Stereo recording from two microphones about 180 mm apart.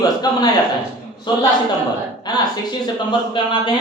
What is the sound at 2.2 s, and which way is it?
Speech, 25° left (ahead or behind).